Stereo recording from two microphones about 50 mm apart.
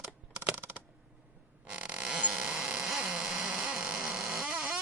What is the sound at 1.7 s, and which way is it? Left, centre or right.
Fart, right.